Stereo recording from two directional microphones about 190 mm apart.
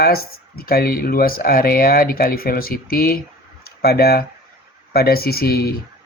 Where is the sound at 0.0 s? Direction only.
55° left (ahead or behind).